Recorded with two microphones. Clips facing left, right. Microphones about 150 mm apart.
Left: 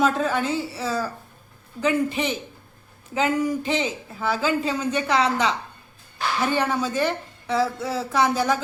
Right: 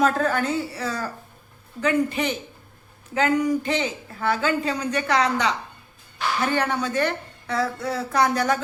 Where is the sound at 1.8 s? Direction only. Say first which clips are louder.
Even; 25° left (ahead or behind).